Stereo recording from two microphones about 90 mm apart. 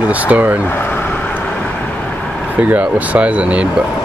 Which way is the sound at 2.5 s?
15° right (ahead or behind).